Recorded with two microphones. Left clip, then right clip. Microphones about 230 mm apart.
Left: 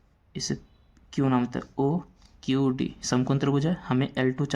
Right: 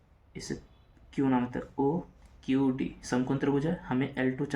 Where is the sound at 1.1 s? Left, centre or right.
Left.